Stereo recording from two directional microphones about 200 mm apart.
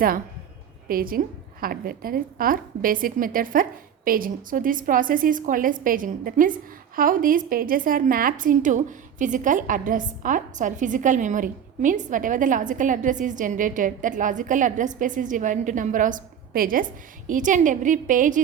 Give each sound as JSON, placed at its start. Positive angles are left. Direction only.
{"t": 0.9, "sound": "a woman's voice", "side_deg": -45}